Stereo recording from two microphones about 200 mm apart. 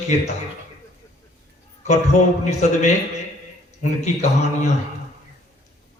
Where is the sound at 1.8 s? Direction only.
35° left (ahead or behind).